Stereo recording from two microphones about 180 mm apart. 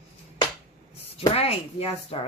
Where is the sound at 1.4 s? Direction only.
35° left (ahead or behind).